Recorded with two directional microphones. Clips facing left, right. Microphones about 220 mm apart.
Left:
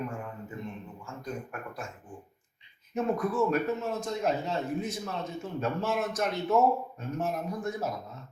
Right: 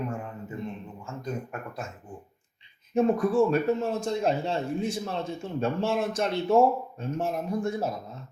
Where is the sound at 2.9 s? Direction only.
30° right (ahead or behind).